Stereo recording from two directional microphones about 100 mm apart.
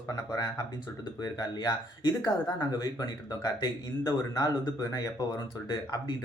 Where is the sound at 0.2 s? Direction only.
35° left (ahead or behind).